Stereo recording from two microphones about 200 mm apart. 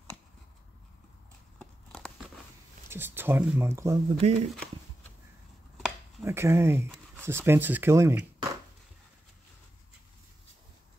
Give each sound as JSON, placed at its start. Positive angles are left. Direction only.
{"t": 1.6, "sound": "a sound", "side_deg": 5}
{"t": 2.9, "sound": "speech", "side_deg": -10}
{"t": 4.2, "sound": "speech", "side_deg": -35}
{"t": 6.2, "sound": "speech", "side_deg": -15}